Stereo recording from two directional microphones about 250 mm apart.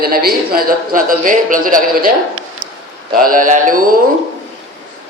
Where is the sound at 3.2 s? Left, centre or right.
Right.